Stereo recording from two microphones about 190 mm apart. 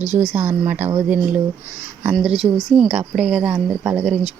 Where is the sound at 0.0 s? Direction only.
35° right (ahead or behind).